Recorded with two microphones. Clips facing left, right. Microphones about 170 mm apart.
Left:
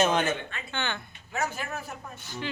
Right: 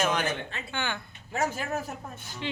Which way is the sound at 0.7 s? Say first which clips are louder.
Even; 10° right (ahead or behind).